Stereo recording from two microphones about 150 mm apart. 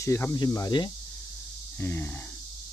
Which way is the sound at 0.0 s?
20° left (ahead or behind).